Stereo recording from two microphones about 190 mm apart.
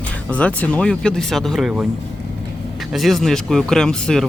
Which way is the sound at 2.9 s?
Centre (ahead or behind).